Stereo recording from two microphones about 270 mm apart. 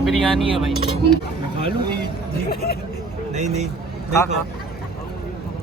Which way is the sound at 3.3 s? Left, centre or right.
Right.